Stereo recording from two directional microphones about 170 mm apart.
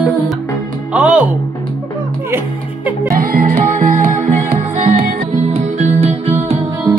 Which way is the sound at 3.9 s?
55° right (ahead or behind).